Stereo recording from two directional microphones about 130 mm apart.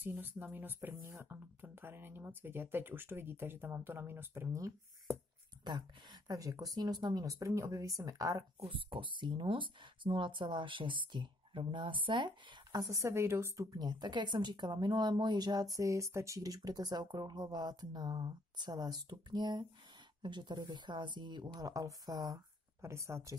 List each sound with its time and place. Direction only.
0.0 s speech: 15° right (ahead or behind)
8.5 s speech: 45° right (ahead or behind); by 13.7 s 20° right (ahead or behind)
13.7 s speech: 35° right (ahead or behind)